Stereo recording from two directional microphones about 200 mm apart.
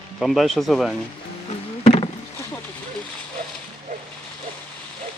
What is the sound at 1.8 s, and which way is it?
Rowboat, 35° left (ahead or behind).